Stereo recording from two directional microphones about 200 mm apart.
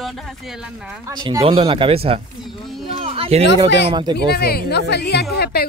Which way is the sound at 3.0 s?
30° right (ahead or behind).